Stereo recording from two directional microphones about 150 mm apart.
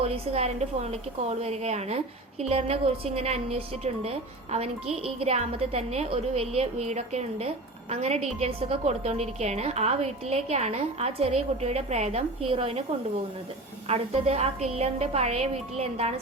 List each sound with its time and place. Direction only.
0.0 s a woman's voice: 45° right (ahead or behind)
13.8 s a woman's voice: 45° right (ahead or behind)